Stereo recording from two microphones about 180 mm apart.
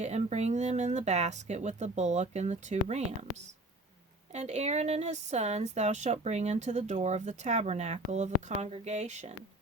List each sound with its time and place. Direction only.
0.0 s speech: 40° right (ahead or behind)
4.3 s speech: 40° right (ahead or behind)